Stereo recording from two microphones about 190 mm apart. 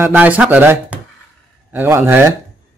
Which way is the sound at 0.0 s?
10° right (ahead or behind).